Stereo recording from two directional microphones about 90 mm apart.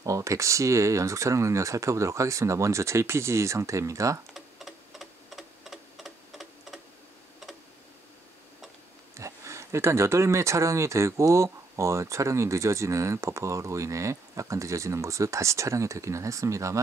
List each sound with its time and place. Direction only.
0.0 s speech: 35° right (ahead or behind)
4.3 s clock: centre (ahead or behind)
9.1 s speech: 35° right (ahead or behind)